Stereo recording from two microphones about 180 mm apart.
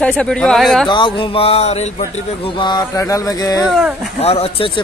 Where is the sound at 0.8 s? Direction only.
25° left (ahead or behind).